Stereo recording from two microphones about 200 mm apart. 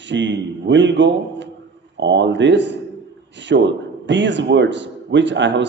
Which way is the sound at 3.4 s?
65° right (ahead or behind).